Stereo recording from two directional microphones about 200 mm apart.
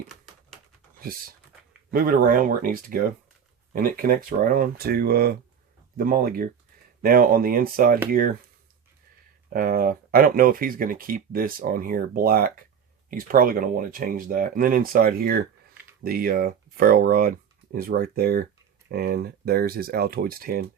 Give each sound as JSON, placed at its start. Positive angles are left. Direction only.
{"t": 1.9, "sound": "speech", "side_deg": -45}
{"t": 9.5, "sound": "speech", "side_deg": -45}